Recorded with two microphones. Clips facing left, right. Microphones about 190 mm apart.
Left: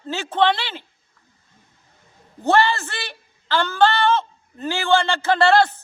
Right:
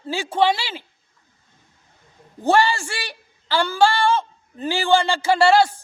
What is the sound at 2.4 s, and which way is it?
A man's voice, 10° right (ahead or behind).